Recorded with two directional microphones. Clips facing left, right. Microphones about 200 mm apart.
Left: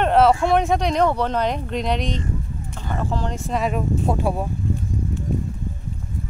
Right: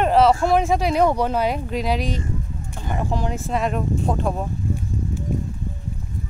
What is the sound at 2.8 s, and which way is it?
Speech, 15° right (ahead or behind).